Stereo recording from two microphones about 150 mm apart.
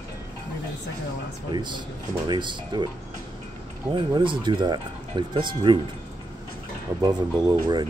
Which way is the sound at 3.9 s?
35° right (ahead or behind).